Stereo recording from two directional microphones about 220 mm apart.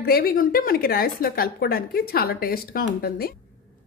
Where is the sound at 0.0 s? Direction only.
45° left (ahead or behind).